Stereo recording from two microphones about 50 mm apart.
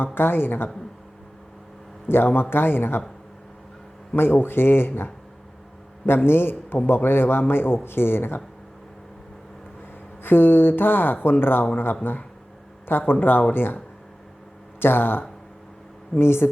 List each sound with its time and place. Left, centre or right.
0.0 s speech: left
2.0 s speech: left
4.1 s speech: left
6.2 s speech: left
10.2 s speech: left
12.9 s speech: left
14.8 s speech: left